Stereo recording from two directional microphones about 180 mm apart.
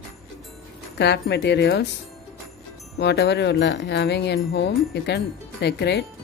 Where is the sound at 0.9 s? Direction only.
70° left (ahead or behind).